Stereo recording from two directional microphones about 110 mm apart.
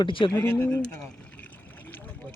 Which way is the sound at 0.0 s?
50° left (ahead or behind).